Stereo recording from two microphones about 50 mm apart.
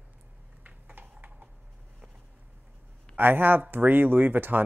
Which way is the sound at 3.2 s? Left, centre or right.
Right.